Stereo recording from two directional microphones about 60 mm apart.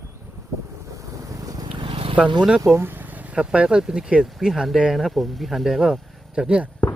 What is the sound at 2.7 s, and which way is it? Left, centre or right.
Vehicle, right.